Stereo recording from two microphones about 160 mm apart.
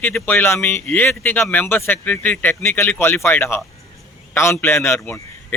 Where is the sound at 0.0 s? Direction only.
10° left (ahead or behind).